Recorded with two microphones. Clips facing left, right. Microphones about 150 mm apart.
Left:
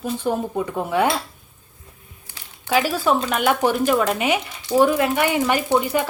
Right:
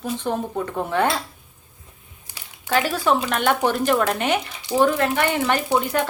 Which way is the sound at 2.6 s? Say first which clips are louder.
Left 1 dB; 5° left (ahead or behind).